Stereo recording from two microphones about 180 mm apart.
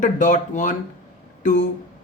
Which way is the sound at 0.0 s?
45° left (ahead or behind).